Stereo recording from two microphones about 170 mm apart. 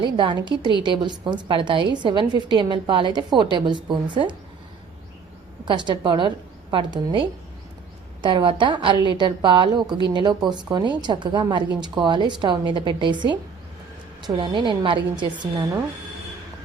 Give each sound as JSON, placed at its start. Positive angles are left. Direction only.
{"t": 0.0, "sound": "a woman's voice", "side_deg": -30}
{"t": 5.6, "sound": "a woman's voice", "side_deg": -25}